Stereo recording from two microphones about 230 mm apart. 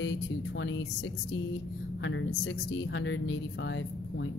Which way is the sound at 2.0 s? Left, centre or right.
Left.